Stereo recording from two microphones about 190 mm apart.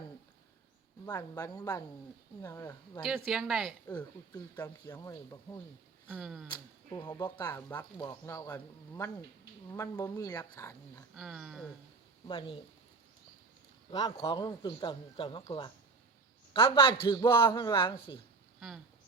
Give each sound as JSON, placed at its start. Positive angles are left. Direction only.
{"t": 1.0, "sound": "speech", "side_deg": 15}
{"t": 3.2, "sound": "speech", "side_deg": 0}
{"t": 3.8, "sound": "speech", "side_deg": 15}
{"t": 6.1, "sound": "speech", "side_deg": -5}
{"t": 6.9, "sound": "speech", "side_deg": 20}
{"t": 11.1, "sound": "speech", "side_deg": 0}
{"t": 12.3, "sound": "speech", "side_deg": 25}
{"t": 13.9, "sound": "speech", "side_deg": 20}